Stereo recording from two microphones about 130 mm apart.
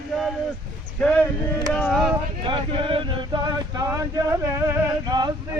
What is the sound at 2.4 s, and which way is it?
Male singing, 40° right (ahead or behind).